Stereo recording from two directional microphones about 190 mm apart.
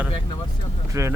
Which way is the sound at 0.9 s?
15° right (ahead or behind).